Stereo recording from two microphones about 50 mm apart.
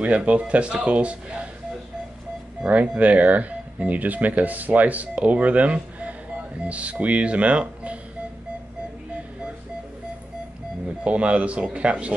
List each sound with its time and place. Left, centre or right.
0.0 s speech: right
2.6 s speech: right
11.1 s speech: right